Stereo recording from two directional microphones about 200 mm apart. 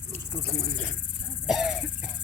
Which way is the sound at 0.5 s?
40° right (ahead or behind).